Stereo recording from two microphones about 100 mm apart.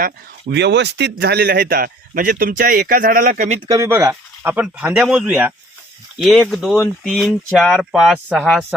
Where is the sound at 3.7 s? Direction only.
30° right (ahead or behind).